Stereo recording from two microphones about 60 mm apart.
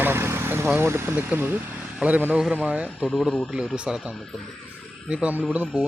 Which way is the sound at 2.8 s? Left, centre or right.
Centre.